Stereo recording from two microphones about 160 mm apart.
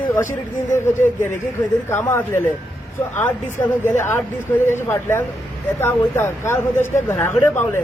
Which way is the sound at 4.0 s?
15° left (ahead or behind).